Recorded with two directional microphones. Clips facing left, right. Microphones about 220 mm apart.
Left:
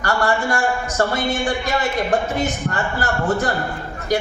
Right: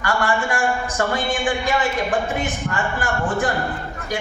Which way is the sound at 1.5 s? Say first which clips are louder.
Even; 40° left (ahead or behind).